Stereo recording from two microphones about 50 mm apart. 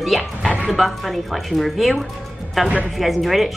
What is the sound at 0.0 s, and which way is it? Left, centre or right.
Speech, centre.